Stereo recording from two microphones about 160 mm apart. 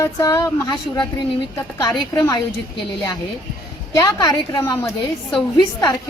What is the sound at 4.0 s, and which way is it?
A child's voice, 25° left (ahead or behind).